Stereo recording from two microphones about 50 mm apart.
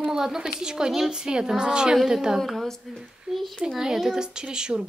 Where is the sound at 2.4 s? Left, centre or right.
Centre.